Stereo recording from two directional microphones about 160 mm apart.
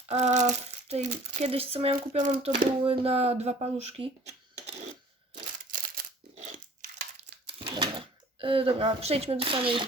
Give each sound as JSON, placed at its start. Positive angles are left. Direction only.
{"t": 0.1, "sound": "speech", "side_deg": -45}
{"t": 5.3, "sound": "a sound", "side_deg": -60}
{"t": 8.4, "sound": "speech", "side_deg": -35}